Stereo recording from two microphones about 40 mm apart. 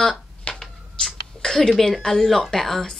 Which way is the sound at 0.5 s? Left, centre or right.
Left.